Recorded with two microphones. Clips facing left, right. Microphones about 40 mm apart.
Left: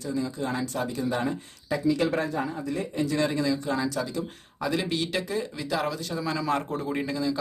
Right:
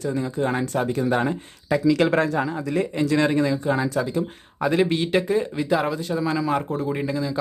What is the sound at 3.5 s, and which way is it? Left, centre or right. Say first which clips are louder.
Speech: right 4 dB; right.